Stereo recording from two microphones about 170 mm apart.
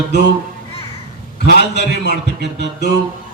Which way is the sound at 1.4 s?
80° left.